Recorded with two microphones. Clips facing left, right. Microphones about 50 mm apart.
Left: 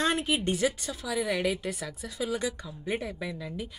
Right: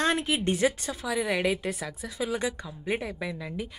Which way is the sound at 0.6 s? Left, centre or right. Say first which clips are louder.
Right 3 dB; right.